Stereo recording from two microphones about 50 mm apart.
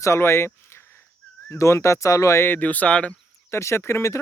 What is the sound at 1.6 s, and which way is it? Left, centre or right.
Speech, left.